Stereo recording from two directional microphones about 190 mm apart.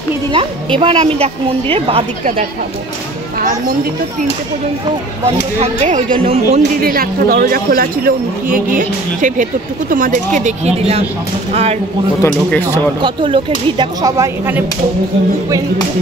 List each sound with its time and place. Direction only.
0.3 s a woman's voice: 25° right (ahead or behind)
5.2 s speech: 35° right (ahead or behind)
6.8 s a man's voice: 50° right (ahead or behind); by 11.8 s 35° right (ahead or behind)
12.2 s speech: 10° left (ahead or behind)
13.0 s a woman's voice: 25° right (ahead or behind)